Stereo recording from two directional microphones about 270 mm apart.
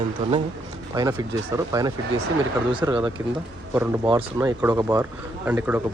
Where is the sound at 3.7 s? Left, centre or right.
Centre.